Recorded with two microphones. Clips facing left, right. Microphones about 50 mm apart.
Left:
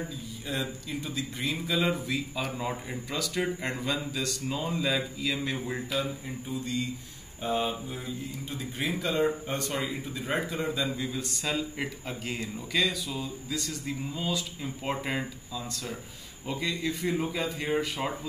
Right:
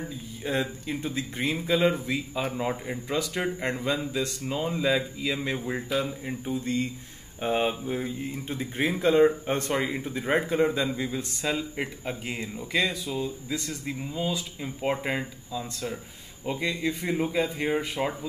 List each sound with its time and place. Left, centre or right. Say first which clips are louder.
0.5 s speech: right 5 dB; right
2.5 s speech: right 4 dB; centre
3.1 s speech: right 2 dB; right
10.9 s speech: right 2 dB; right
14.1 s speech: right 4 dB; centre